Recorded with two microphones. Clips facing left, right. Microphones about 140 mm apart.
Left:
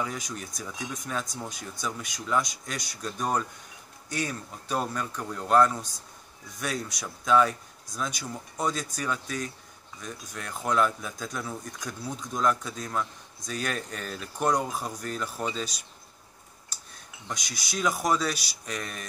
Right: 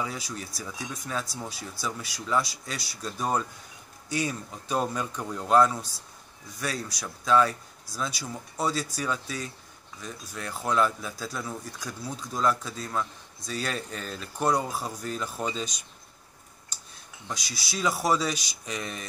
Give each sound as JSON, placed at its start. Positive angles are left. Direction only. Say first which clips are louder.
{"t": 0.0, "sound": "speech", "louder": "even", "side_deg": -5}
{"t": 17.3, "sound": "speech", "louder": "even", "side_deg": -5}